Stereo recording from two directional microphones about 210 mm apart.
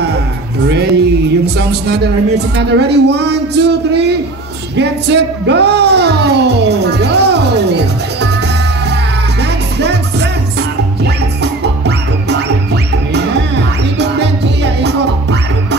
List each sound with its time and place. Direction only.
0.7 s speech: 55° right (ahead or behind)
9.4 s music: 55° right (ahead or behind)
11.4 s music: 55° right (ahead or behind)